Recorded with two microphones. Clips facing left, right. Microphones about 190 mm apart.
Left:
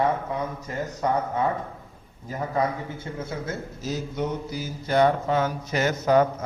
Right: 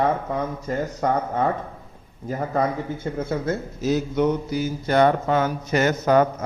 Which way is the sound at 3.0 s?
60° right (ahead or behind).